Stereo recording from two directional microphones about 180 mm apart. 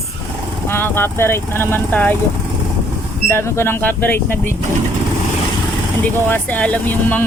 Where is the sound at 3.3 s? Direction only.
15° left (ahead or behind).